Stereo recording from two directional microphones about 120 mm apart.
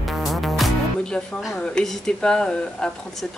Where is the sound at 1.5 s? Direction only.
5° left (ahead or behind).